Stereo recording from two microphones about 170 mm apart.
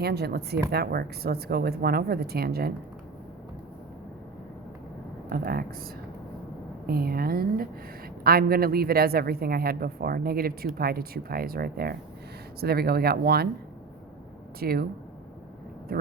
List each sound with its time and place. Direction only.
0.0 s a woman's voice: 75° right (ahead or behind)
5.3 s a woman's voice: 60° right (ahead or behind)
6.8 s a woman's voice: 65° right (ahead or behind)
14.6 s a woman's voice: 60° right (ahead or behind)